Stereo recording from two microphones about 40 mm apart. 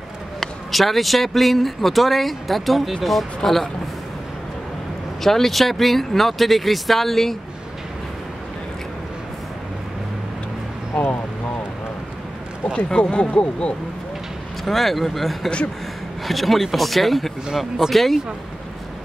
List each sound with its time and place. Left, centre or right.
0.4 s speech: centre
5.2 s speech: centre
12.9 s speech: left
14.6 s speech: centre